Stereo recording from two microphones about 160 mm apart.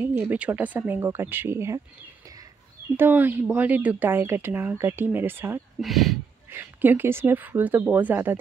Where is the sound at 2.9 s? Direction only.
10° right (ahead or behind).